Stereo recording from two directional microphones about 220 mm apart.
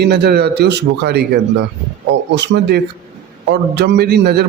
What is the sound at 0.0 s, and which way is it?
A man's voice, 45° right (ahead or behind).